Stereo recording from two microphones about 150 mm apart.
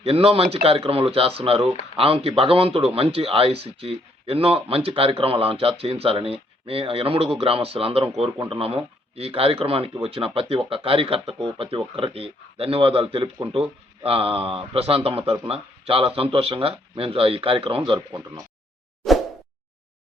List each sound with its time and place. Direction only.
0.0 s speech: 40° right (ahead or behind)